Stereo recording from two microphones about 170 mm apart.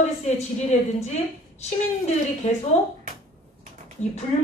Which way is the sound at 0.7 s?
40° left (ahead or behind).